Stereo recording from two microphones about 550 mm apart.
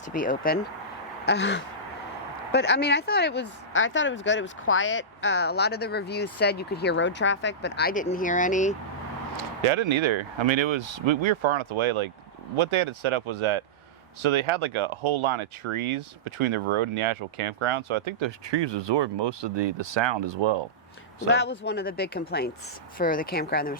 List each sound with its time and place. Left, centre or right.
0.1 s speech: centre
1.2 s a sound: centre
2.5 s speech: centre
9.4 s speech: right
21.2 s speech: centre